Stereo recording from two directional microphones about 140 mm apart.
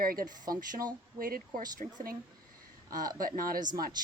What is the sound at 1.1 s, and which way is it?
Speech, 90° right.